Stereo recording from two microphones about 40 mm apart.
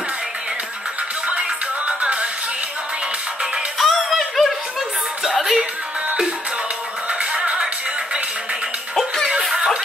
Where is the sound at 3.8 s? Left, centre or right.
Centre.